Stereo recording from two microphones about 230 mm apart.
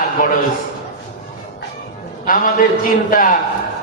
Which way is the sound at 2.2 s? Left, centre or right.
Left.